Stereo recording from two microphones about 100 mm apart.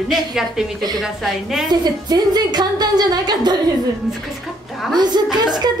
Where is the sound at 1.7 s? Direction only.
45° right (ahead or behind).